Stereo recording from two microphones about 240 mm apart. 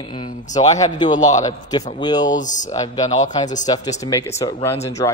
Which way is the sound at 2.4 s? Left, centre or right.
Left.